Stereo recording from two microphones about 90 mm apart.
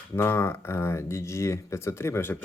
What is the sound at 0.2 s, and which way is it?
Speech, 30° left (ahead or behind).